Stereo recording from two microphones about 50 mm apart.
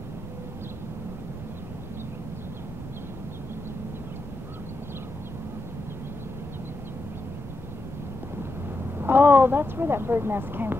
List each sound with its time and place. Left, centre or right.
9.0 s speech: right